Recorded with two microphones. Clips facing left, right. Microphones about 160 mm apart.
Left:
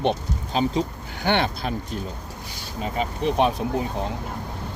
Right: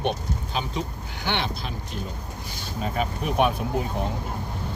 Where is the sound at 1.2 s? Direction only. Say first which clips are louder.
Left 6 dB; 50° left (ahead or behind).